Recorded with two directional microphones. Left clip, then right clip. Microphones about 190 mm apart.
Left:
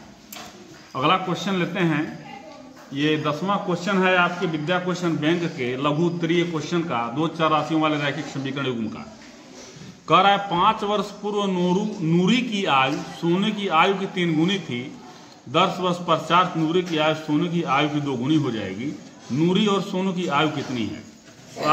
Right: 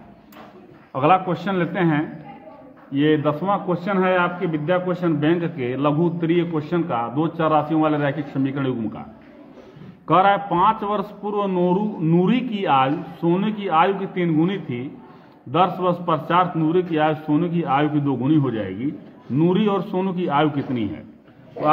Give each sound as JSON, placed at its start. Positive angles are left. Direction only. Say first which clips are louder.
{"t": 0.9, "sound": "a man's voice", "louder": "right 3 dB", "side_deg": -50}
{"t": 10.0, "sound": "a man's voice", "louder": "right 1 dB", "side_deg": -45}